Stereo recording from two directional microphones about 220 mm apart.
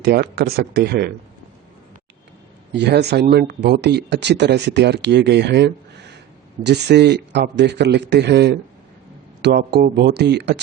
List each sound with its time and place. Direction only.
0.0 s speech: 45° right (ahead or behind)
2.7 s speech: 50° right (ahead or behind)